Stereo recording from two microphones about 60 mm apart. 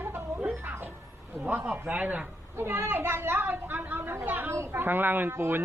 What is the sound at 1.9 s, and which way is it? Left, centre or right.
Speech, right.